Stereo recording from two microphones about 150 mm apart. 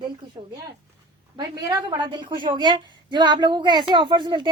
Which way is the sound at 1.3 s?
25° right (ahead or behind).